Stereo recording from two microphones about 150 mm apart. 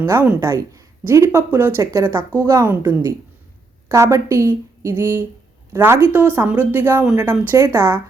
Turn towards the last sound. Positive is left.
turn(degrees=-20)  # may be behind; listen again after turning